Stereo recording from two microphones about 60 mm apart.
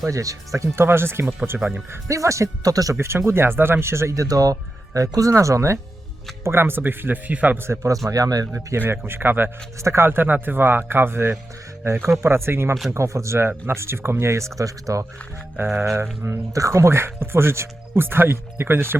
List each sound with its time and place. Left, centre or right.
0.1 s speech: right
0.9 s speech: right
1.6 s speech: centre
2.0 s speech: right
3.0 s speech: right
6.4 s speech: right
7.6 s speech: right
7.9 s speech: right
8.9 s speech: right
9.8 s speech: right
10.1 s speech: right
15.5 s speech: right
16.5 s speech: right